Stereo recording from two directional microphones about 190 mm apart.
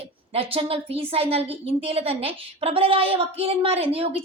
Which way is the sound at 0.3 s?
30° right (ahead or behind).